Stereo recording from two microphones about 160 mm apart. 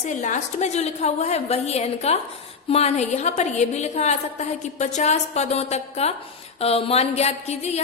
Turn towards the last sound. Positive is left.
turn(degrees=40)  # may be behind; listen again after turning